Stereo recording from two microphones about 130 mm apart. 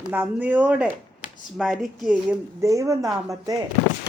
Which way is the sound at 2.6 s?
25° right (ahead or behind).